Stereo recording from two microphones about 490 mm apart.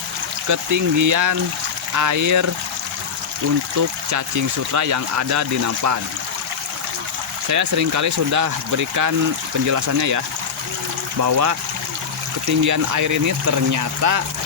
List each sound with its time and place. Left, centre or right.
0.4 s speech: right
3.8 s speech: right
7.5 s speech: right